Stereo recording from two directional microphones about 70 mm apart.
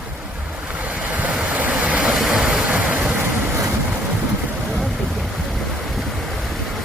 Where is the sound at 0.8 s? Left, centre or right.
Centre.